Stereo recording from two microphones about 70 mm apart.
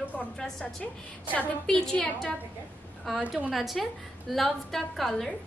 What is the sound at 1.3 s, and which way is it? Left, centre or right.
Speech, left.